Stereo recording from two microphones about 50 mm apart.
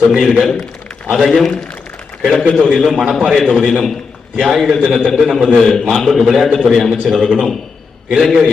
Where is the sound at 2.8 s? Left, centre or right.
Centre.